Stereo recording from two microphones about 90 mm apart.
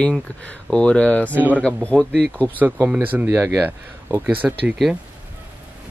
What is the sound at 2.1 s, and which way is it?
Speech, 20° right (ahead or behind).